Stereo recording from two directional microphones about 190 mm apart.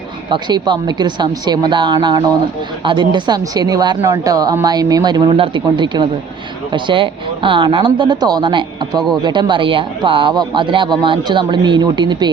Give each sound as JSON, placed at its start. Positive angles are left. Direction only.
{"t": 0.3, "sound": "speech", "side_deg": -20}